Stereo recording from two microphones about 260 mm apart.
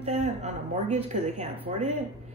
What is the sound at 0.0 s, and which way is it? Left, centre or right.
Speech, right.